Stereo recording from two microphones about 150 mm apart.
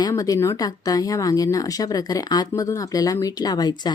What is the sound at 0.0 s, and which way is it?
Speech, 25° left (ahead or behind).